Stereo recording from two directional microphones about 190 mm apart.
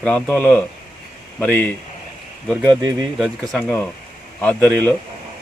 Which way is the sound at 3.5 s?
10° left (ahead or behind).